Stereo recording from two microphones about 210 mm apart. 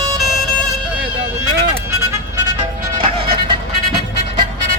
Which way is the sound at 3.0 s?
25° right (ahead or behind).